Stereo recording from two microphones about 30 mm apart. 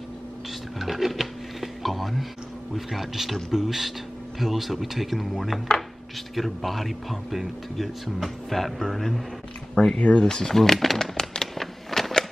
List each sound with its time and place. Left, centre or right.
0.7 s music: centre
2.7 s a man's voice: centre
9.9 s speech: left
10.2 s speech: left
10.5 s speech: centre
11.0 s a sound: centre